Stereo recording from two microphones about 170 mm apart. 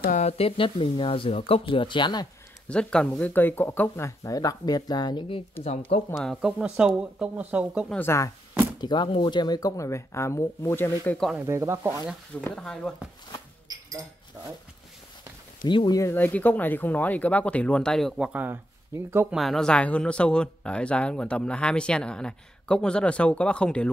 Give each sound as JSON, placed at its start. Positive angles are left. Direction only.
{"t": 0.0, "sound": "speech", "side_deg": 45}
{"t": 2.7, "sound": "speech", "side_deg": 5}
{"t": 6.1, "sound": "speech", "side_deg": -5}
{"t": 7.9, "sound": "speech", "side_deg": 15}
{"t": 8.8, "sound": "speech", "side_deg": 25}
{"t": 11.1, "sound": "speech", "side_deg": 0}
{"t": 11.4, "sound": "speech", "side_deg": -15}
{"t": 12.5, "sound": "speech", "side_deg": 5}
{"t": 13.7, "sound": "a sound", "side_deg": -20}
{"t": 15.6, "sound": "speech", "side_deg": 25}
{"t": 19.3, "sound": "speech", "side_deg": 0}